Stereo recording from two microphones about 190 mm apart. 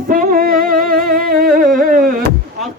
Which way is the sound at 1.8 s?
45° right (ahead or behind).